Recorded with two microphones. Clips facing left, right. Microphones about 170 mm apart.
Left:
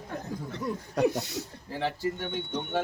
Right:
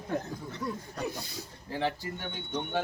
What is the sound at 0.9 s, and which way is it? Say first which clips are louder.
Speech: left 10 dB; 75° left (ahead or behind).